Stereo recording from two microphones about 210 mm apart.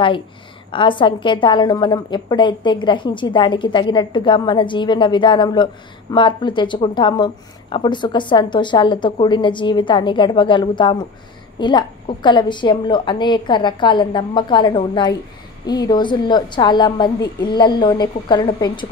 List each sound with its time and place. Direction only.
0.7 s a woman's voice: 25° left (ahead or behind)